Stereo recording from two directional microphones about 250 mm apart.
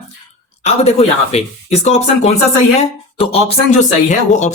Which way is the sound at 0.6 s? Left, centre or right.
Left.